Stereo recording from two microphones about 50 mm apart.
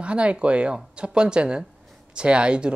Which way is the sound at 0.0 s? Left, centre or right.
Right.